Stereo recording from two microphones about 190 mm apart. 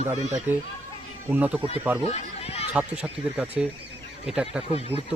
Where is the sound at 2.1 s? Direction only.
35° left (ahead or behind).